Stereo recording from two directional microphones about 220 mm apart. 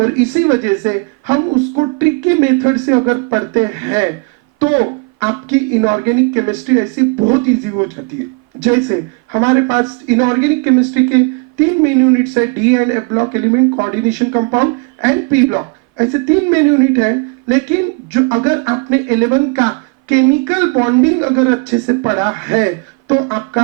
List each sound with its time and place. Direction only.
0.0 s speech: 15° right (ahead or behind)
1.5 s speech: 30° right (ahead or behind)
2.0 s speech: 15° right (ahead or behind)